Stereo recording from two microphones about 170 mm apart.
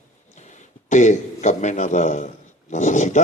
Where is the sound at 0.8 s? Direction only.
45° left (ahead or behind).